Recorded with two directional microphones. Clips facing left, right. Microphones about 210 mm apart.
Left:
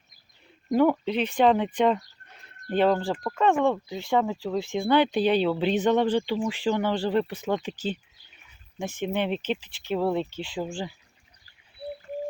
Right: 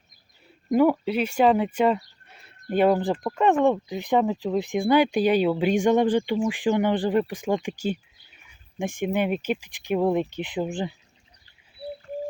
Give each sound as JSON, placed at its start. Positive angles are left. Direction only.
{"t": 0.7, "sound": "speech", "side_deg": -5}